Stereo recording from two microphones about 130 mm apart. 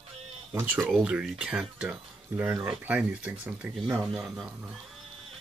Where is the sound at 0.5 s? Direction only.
15° right (ahead or behind).